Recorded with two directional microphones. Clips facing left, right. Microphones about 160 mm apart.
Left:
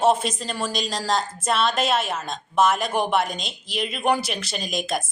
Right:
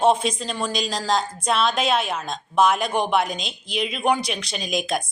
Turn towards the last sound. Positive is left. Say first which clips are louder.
# right 2 dB
turn(degrees=0)  # may be behind; listen again after turning